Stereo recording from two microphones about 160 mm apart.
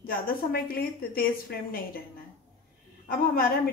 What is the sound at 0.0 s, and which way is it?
A woman's voice, 65° left (ahead or behind).